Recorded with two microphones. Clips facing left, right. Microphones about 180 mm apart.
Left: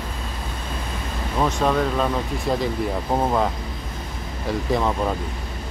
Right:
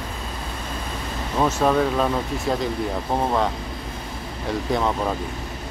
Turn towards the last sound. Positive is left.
turn(degrees=0)  # may be behind; listen again after turning